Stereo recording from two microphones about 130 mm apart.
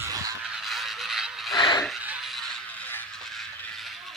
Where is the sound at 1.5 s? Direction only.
35° left (ahead or behind).